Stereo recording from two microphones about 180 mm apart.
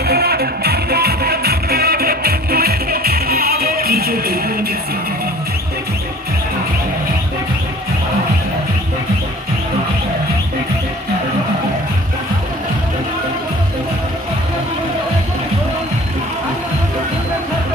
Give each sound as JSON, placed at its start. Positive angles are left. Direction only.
{"t": 0.0, "sound": "music", "side_deg": -60}